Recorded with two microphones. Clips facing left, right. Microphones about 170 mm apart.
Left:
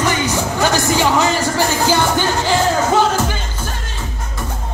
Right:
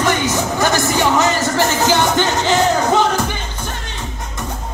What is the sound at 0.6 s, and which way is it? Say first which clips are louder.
Music: left 1 dB; 15° left (ahead or behind).